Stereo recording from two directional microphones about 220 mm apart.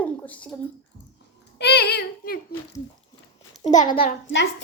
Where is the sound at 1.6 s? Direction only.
50° left (ahead or behind).